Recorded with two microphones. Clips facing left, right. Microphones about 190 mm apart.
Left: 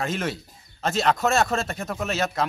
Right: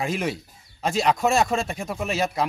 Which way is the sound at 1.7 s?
10° right (ahead or behind).